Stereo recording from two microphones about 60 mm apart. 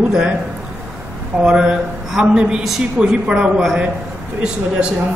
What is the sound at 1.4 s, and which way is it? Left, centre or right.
A man's voice, centre.